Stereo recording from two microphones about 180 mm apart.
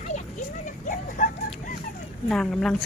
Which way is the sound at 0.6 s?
45° left (ahead or behind).